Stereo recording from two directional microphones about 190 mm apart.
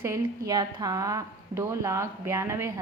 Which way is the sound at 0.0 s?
15° right (ahead or behind).